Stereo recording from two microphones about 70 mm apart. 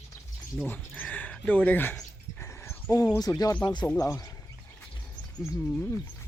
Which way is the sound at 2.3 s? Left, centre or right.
Left.